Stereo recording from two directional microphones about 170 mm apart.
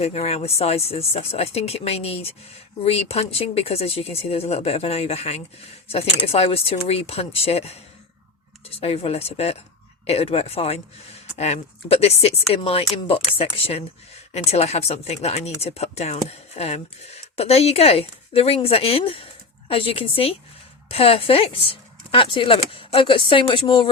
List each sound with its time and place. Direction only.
0.0 s speech: 40° left (ahead or behind)